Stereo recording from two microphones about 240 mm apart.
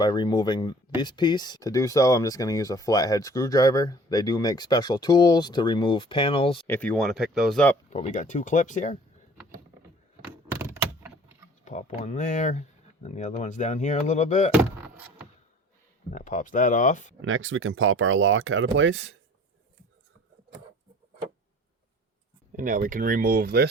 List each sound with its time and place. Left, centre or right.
0.0 s speech: centre
6.7 s speech: centre
7.9 s speech: left
10.5 s vehicle: centre
11.6 s speech: left
14.5 s speech: centre
16.0 s speech: left
17.2 s speech: right
22.5 s speech: right